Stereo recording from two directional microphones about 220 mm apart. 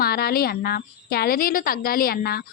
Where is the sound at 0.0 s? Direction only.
45° left (ahead or behind).